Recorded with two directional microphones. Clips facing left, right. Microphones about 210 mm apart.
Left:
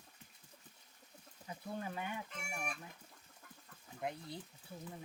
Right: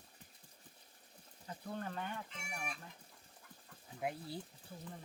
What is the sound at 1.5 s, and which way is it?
Speech, 10° left (ahead or behind).